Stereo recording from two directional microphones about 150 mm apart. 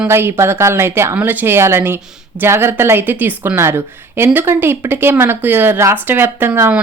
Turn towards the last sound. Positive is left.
turn(degrees=-15)  # may be behind; listen again after turning